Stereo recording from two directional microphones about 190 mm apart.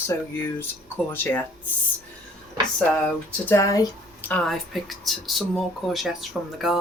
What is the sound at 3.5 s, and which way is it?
Speech, 15° left (ahead or behind).